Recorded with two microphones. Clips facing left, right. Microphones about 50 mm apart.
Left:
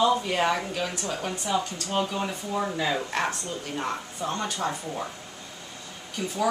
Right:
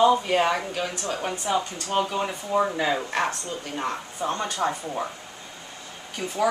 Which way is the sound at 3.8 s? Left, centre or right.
Centre.